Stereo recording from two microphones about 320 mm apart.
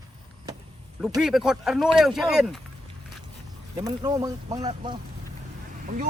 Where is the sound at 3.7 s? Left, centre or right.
Centre.